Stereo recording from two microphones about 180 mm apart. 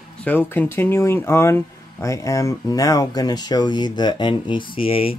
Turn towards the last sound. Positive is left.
turn(degrees=30)  # may be behind; listen again after turning